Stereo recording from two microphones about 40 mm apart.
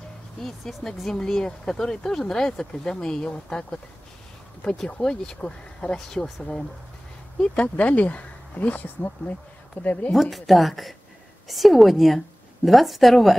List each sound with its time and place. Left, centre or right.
0.8 s speech: centre
5.0 s speech: centre
7.3 s speech: left
10.1 s a woman's voice: centre